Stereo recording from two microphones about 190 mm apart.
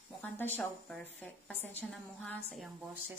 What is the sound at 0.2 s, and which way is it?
A woman's voice, 5° left (ahead or behind).